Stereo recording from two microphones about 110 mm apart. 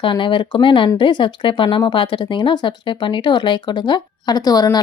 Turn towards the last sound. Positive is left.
turn(degrees=35)  # may be behind; listen again after turning